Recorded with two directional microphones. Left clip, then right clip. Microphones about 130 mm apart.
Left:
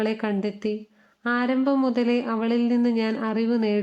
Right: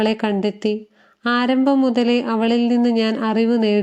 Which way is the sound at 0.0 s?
20° right (ahead or behind).